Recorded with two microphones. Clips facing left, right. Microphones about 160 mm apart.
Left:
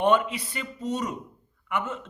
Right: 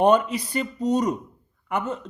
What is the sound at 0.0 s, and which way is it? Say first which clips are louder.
Speech: right 4 dB; 40° right (ahead or behind).